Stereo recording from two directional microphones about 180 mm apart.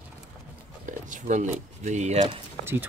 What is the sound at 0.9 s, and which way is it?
Speech, 45° right (ahead or behind).